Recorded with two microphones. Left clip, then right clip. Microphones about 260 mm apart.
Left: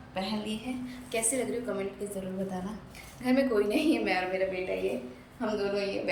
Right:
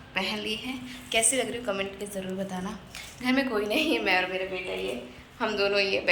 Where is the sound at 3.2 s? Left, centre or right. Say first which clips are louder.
Even; centre.